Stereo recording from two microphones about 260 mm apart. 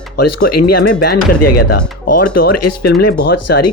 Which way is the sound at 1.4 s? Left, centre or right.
Left.